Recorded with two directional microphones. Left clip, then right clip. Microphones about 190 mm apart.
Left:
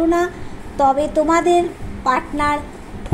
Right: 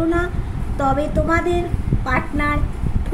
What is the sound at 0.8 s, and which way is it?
A woman's voice, 10° left (ahead or behind).